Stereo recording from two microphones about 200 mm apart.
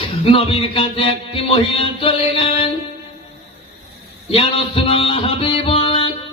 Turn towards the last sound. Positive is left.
turn(degrees=30)  # may be behind; listen again after turning